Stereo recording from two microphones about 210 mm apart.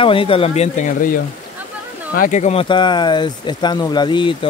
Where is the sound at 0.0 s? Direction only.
25° left (ahead or behind).